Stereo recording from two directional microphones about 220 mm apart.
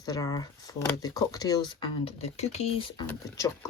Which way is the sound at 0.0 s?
15° left (ahead or behind).